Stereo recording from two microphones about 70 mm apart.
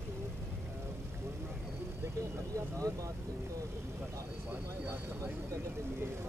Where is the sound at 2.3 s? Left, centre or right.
Right.